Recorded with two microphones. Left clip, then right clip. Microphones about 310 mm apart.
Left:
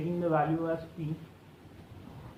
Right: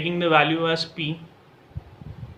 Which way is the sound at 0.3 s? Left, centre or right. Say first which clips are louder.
Right 10 dB; right.